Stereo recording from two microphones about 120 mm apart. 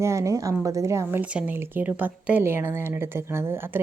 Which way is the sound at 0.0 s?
25° right (ahead or behind).